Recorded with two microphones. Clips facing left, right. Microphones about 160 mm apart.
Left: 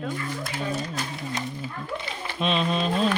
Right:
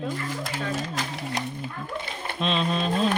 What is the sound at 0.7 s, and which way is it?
Speech, 90° right.